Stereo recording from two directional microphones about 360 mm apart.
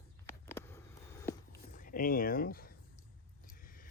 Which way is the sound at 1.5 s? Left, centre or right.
Left.